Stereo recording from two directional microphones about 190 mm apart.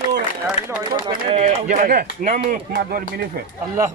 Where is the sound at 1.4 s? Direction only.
45° right (ahead or behind).